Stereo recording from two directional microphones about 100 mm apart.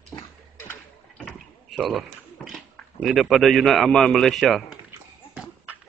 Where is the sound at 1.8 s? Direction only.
Centre (ahead or behind).